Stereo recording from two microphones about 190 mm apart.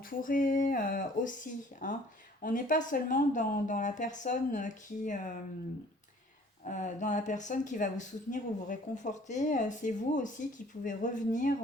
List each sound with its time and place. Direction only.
0.1 s speech: 45° left (ahead or behind)
6.7 s speech: 40° left (ahead or behind)